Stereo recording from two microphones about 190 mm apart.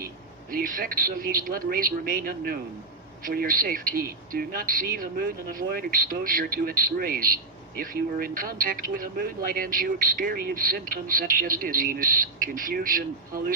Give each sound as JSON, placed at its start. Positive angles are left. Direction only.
{"t": 0.5, "sound": "speech", "side_deg": -50}